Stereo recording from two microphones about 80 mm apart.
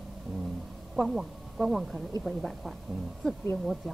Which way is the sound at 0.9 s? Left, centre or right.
Centre.